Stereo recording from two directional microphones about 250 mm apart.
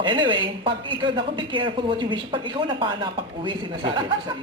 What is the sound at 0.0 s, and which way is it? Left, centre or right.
Speech, centre.